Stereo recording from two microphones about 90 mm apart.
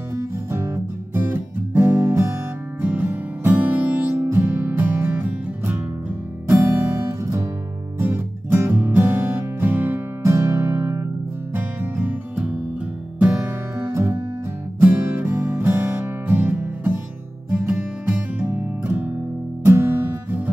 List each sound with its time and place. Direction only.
0.5 s music: 30° right (ahead or behind)
11.5 s music: 20° right (ahead or behind)
13.8 s music: 35° right (ahead or behind)
14.8 s music: 20° right (ahead or behind)
19.6 s music: 25° right (ahead or behind)